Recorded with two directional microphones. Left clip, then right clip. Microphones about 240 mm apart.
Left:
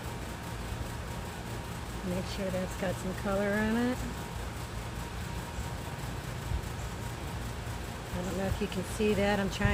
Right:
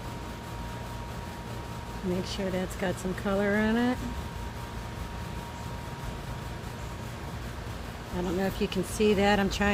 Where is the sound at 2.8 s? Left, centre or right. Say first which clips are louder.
Right 3 dB; right.